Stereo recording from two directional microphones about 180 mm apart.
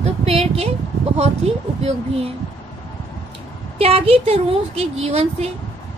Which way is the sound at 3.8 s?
35° right (ahead or behind).